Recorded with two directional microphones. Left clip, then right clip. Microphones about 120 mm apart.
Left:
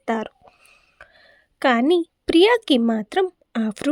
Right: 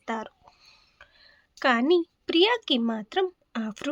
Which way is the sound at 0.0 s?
55° left (ahead or behind).